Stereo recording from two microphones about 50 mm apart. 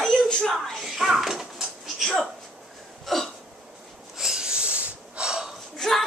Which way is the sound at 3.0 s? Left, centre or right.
Centre.